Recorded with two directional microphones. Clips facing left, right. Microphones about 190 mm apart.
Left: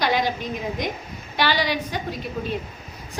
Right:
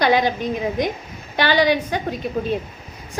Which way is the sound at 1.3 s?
55° right (ahead or behind).